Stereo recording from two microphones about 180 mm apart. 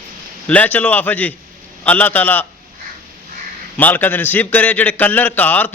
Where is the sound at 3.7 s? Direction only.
10° left (ahead or behind).